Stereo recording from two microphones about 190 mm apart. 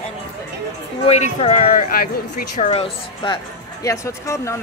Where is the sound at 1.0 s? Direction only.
35° left (ahead or behind); by 2.0 s 50° left (ahead or behind).